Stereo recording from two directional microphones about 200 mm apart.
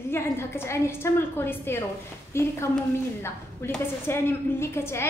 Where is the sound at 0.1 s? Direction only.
10° left (ahead or behind).